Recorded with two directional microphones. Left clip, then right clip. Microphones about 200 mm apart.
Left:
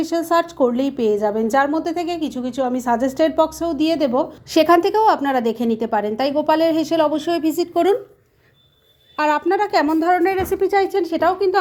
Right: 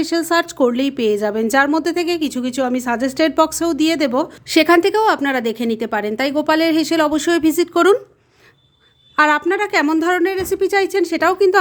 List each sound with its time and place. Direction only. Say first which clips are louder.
0.0 s a woman's voice: right 1 dB; 25° right (ahead or behind)
9.1 s a woman's voice: right 3 dB; 25° right (ahead or behind)